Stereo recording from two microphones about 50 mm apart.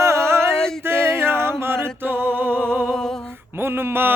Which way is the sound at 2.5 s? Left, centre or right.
Centre.